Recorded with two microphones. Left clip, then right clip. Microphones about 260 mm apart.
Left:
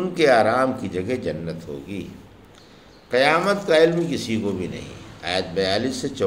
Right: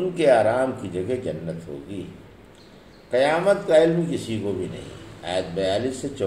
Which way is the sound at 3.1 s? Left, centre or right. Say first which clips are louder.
Left 1 dB; left.